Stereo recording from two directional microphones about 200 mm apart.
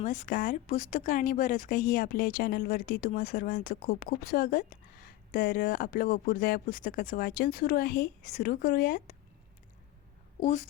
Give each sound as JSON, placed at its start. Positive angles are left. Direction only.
{"t": 0.0, "sound": "speech", "side_deg": 40}
{"t": 10.4, "sound": "speech", "side_deg": 35}